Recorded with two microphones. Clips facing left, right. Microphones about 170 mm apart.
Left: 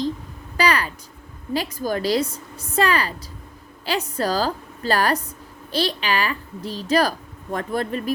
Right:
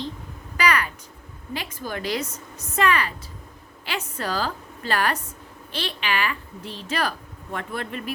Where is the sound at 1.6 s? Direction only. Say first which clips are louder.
Left 8 dB; 40° left (ahead or behind).